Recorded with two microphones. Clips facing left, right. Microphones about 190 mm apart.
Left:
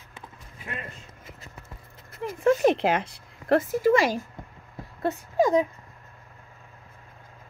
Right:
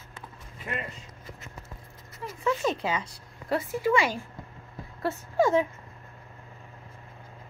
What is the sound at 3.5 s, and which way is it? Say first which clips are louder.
Speech: left 5 dB; 40° left (ahead or behind).